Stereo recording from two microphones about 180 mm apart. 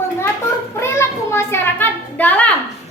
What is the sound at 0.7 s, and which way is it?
A child's voice, 15° left (ahead or behind).